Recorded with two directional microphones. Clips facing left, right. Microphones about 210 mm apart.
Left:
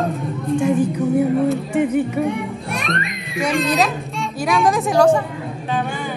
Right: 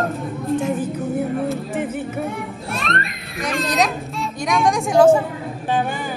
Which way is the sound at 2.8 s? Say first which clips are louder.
Right 1 dB; centre (ahead or behind).